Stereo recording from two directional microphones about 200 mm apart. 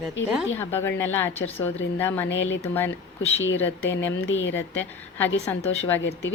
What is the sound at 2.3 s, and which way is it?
Speech, 70° left (ahead or behind).